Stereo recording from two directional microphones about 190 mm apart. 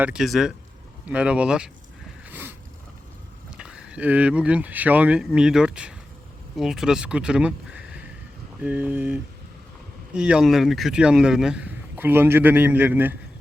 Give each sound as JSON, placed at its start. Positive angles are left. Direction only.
{"t": 0.0, "sound": "speech", "side_deg": -5}
{"t": 2.2, "sound": "a sound", "side_deg": -10}
{"t": 3.5, "sound": "speech", "side_deg": -5}